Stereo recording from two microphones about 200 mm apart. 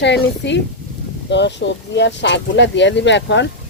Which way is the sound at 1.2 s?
60° left (ahead or behind).